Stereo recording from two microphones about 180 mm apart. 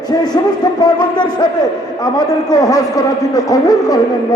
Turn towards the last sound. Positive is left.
turn(degrees=20)  # may be behind; listen again after turning